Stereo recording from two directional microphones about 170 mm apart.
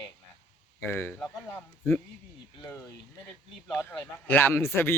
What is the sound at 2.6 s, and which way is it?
A man's voice, 15° left (ahead or behind).